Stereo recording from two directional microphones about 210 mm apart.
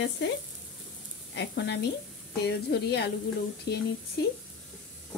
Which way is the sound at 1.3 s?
55° left (ahead or behind).